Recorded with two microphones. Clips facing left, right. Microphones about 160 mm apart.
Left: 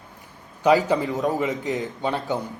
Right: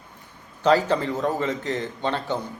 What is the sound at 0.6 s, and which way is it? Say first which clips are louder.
A man's voice: left 1 dB; 15° left (ahead or behind).